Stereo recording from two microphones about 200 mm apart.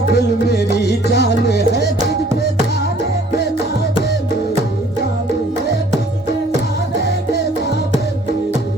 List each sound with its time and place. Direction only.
0.1 s music: 55° left (ahead or behind)